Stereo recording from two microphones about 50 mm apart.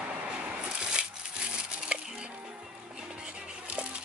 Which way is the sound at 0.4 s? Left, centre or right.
Centre.